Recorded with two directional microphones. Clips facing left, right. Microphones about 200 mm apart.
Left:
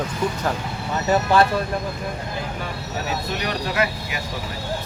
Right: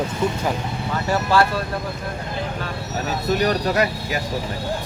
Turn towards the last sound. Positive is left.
turn(degrees=-40)  # may be behind; listen again after turning